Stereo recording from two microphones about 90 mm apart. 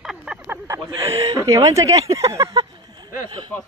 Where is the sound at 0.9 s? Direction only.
35° right (ahead or behind).